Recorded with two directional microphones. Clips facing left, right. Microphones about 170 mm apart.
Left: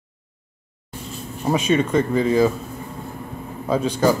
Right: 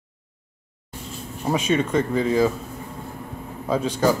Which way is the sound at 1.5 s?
20° left (ahead or behind).